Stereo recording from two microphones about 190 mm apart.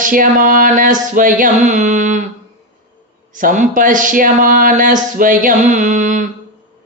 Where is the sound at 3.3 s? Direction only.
45° right (ahead or behind).